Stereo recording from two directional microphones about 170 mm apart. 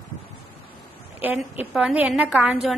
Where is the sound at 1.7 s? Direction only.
10° right (ahead or behind).